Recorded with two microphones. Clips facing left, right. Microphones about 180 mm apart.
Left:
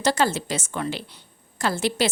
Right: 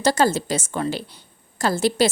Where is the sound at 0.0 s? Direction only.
40° right (ahead or behind).